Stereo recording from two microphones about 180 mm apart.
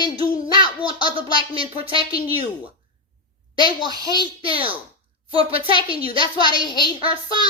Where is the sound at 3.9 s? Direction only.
20° right (ahead or behind).